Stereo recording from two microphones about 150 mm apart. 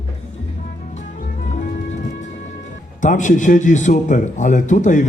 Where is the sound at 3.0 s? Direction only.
55° left (ahead or behind).